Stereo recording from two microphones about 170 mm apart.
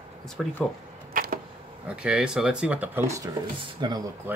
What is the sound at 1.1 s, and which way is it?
Arrow, 60° right (ahead or behind).